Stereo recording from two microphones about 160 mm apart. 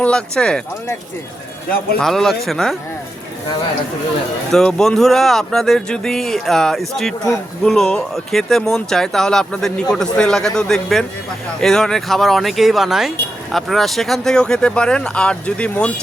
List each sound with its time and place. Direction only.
0.0 s speech: 5° left (ahead or behind)
2.0 s speech: centre (ahead or behind)
4.5 s speech: 5° left (ahead or behind)